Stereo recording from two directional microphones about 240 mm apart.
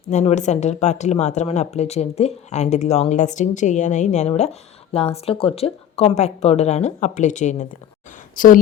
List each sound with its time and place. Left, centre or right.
0.1 s speech: left